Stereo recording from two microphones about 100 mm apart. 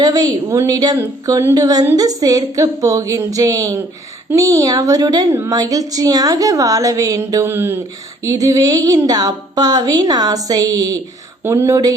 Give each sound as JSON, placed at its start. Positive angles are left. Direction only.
{"t": 0.0, "sound": "speech", "side_deg": -40}
{"t": 8.2, "sound": "speech", "side_deg": -35}